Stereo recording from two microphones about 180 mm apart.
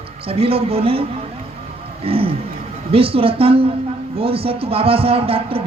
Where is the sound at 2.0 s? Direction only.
30° right (ahead or behind).